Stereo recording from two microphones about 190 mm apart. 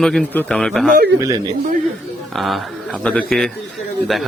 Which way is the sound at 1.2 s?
20° right (ahead or behind).